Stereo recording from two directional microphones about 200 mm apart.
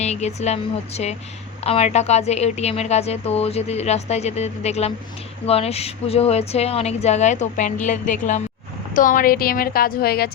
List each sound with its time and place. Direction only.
0.0 s a woman's voice: 35° left (ahead or behind); by 10.3 s 50° left (ahead or behind)